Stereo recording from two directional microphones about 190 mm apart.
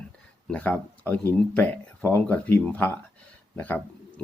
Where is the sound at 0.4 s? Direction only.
10° left (ahead or behind).